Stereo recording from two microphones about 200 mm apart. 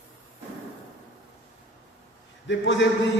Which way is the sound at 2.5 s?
60° left (ahead or behind).